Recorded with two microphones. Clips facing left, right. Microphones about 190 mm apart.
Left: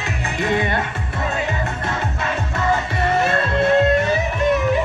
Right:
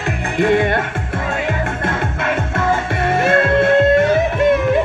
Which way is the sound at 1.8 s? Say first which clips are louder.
Right 4 dB; 50° right (ahead or behind).